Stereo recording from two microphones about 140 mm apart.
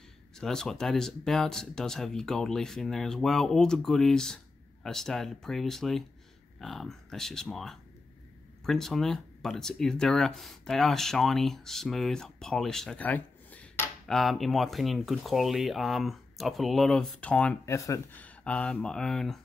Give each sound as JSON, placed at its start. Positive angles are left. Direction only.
{"t": 0.4, "sound": "speech", "side_deg": 5}
{"t": 17.6, "sound": "speech", "side_deg": 20}
{"t": 18.2, "sound": "speech", "side_deg": 10}